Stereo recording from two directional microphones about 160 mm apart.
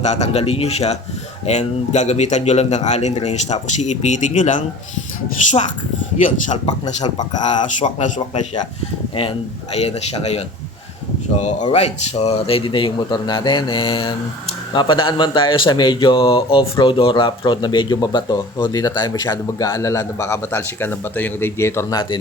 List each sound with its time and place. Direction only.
0.0 s a man's voice: 45° left (ahead or behind)
6.2 s a man's voice: 45° left (ahead or behind)
9.7 s speech: 40° left (ahead or behind)
11.7 s a man's voice: 40° left (ahead or behind); by 21.9 s 15° left (ahead or behind)